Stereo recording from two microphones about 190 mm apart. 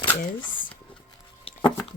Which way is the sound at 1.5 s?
30° left (ahead or behind).